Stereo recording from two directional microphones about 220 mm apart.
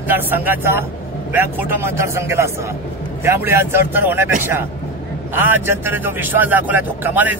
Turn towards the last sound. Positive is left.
turn(degrees=-10)  # may be behind; listen again after turning